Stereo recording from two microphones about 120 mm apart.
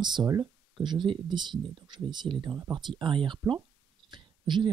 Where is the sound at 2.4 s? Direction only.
30° right (ahead or behind).